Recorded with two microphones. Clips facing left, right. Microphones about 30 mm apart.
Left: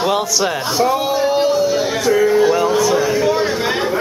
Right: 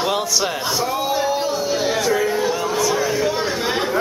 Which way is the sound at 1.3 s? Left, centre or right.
Left.